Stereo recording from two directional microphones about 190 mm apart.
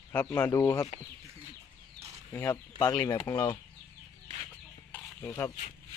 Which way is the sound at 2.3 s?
15° left (ahead or behind).